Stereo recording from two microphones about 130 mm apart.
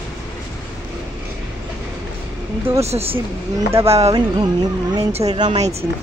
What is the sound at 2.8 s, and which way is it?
Speech, 50° right (ahead or behind).